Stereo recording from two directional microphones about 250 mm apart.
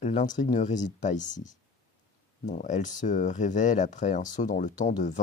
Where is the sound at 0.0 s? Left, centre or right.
Left.